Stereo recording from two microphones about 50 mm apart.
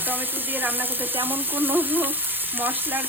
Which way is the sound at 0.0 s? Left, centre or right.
Right.